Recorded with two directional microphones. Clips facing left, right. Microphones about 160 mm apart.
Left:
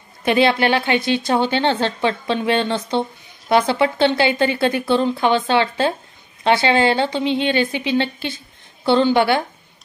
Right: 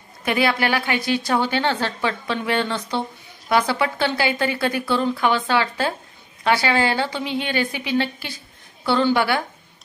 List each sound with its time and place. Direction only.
0.2 s speech: 25° left (ahead or behind)